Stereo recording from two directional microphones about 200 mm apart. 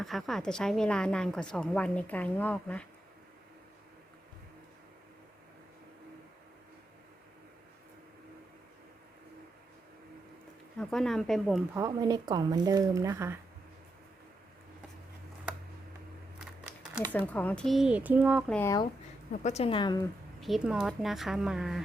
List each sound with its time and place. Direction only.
0.0 s a woman's voice: centre (ahead or behind)
10.8 s a woman's voice: centre (ahead or behind)
11.7 s speech: 15° right (ahead or behind)
17.1 s a woman's voice: 10° left (ahead or behind)
18.5 s speech: 10° left (ahead or behind)
19.4 s a woman's voice: 35° left (ahead or behind)
20.4 s a woman's voice: centre (ahead or behind)